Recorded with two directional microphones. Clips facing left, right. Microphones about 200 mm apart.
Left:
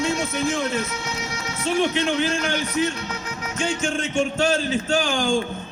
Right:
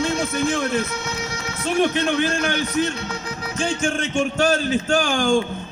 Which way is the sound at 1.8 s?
60° right (ahead or behind).